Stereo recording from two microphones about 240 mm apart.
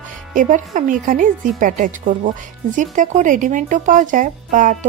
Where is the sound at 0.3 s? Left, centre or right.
Right.